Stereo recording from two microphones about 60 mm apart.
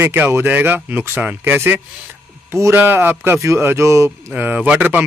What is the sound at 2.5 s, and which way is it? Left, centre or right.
Speech, right.